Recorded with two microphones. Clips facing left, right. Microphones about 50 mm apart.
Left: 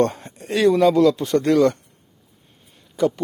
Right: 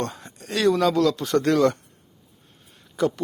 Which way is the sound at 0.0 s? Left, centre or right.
Left.